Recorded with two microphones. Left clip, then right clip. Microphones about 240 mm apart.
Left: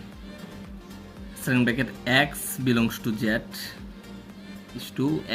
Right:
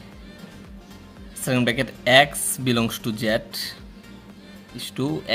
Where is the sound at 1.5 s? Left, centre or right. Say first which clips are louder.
Right 2 dB; right.